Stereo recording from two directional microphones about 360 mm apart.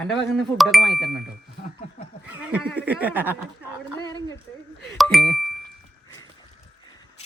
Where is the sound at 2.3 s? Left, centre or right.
Centre.